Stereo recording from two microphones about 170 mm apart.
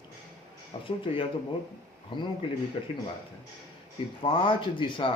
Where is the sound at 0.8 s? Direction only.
35° left (ahead or behind).